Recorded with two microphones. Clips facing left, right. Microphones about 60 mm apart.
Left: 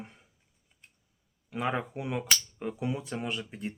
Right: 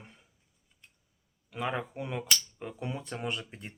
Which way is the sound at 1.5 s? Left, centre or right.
Centre.